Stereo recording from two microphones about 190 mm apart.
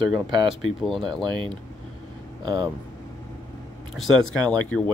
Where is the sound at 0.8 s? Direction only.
Centre (ahead or behind).